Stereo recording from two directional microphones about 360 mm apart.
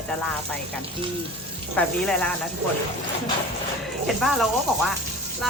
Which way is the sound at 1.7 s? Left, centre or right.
Centre.